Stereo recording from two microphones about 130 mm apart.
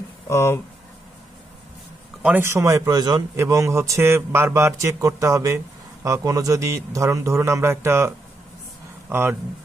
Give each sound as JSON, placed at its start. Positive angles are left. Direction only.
{"t": 0.3, "sound": "speech", "side_deg": 20}
{"t": 2.2, "sound": "a man's voice", "side_deg": -15}
{"t": 9.1, "sound": "speech", "side_deg": -15}